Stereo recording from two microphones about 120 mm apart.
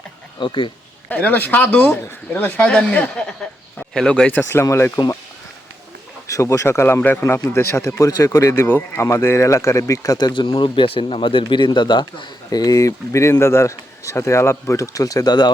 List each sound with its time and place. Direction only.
0.3 s speech: 45° left (ahead or behind)
1.1 s speech: 15° left (ahead or behind)
6.2 s speech: 25° left (ahead or behind)